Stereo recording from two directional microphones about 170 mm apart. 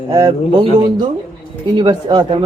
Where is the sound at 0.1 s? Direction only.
20° right (ahead or behind).